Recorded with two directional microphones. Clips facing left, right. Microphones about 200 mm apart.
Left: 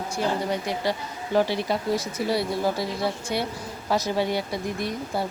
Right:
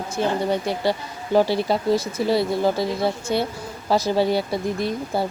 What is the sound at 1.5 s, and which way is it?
Speech, 30° right (ahead or behind).